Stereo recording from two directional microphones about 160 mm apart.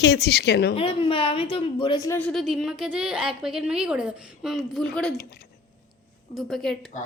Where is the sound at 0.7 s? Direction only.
35° left (ahead or behind).